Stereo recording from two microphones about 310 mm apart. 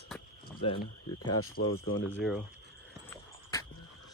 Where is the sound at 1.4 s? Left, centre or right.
Left.